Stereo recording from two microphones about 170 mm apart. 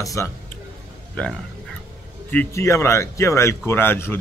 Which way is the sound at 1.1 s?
5° left (ahead or behind).